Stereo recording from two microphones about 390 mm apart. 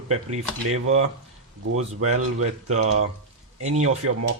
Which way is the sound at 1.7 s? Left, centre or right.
Right.